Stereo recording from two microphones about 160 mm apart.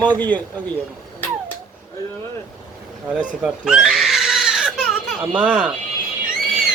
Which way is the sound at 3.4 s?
5° right (ahead or behind).